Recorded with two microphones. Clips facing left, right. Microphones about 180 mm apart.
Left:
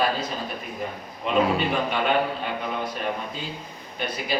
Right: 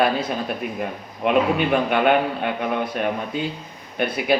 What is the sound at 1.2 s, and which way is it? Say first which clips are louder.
A man's voice: right 4 dB; 65° right (ahead or behind).